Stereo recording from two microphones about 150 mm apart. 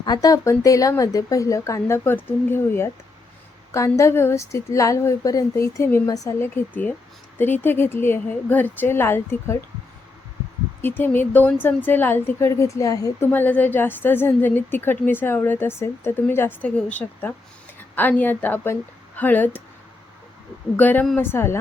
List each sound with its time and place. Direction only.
0.0 s a woman's voice: 25° left (ahead or behind)
10.8 s a woman's voice: 15° left (ahead or behind)
20.7 s a woman's voice: 10° left (ahead or behind)